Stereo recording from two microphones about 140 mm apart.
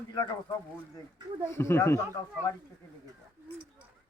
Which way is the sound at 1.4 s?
20° left (ahead or behind).